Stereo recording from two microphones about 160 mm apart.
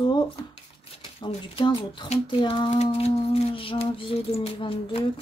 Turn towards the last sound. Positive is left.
turn(degrees=35)  # may be behind; listen again after turning